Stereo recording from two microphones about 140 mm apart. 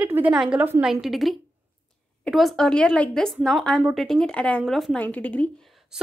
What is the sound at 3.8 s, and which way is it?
Speech, 10° right (ahead or behind).